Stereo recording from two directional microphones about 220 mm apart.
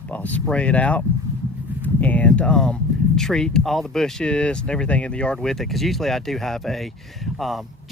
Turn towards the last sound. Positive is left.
turn(degrees=0)  # may be behind; listen again after turning